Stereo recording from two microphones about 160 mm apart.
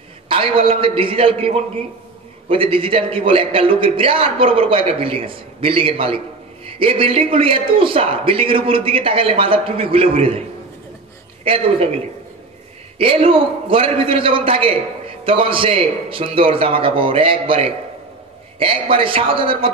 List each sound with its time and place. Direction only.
0.3 s a man's voice: 35° right (ahead or behind)
11.4 s a man's voice: 35° right (ahead or behind)
13.0 s a man's voice: 35° right (ahead or behind)
18.6 s a man's voice: 35° right (ahead or behind)